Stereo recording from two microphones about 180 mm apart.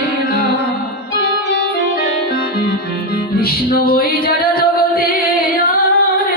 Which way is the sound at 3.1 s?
55° left (ahead or behind).